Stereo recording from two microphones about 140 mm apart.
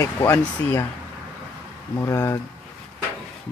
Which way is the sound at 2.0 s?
25° left (ahead or behind).